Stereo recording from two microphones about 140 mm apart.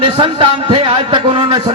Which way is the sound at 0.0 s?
35° right (ahead or behind).